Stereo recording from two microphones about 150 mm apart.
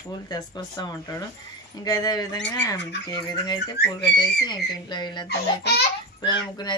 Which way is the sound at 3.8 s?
90° left.